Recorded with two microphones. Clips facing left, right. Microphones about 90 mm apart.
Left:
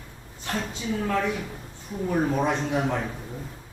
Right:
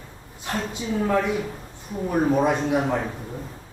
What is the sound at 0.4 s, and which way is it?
Speech, 15° right (ahead or behind).